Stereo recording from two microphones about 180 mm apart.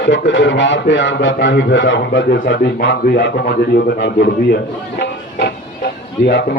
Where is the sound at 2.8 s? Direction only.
65° left (ahead or behind).